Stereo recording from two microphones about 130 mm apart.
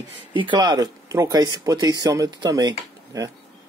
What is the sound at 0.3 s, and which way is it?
Speech, 40° right (ahead or behind).